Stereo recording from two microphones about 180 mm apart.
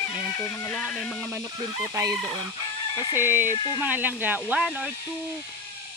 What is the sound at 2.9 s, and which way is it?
Speech, 25° left (ahead or behind).